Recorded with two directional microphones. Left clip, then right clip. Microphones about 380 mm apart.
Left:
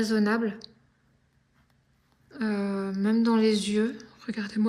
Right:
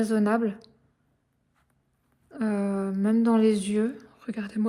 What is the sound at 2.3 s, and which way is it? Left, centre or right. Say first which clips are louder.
A woman's voice: right 2 dB; centre.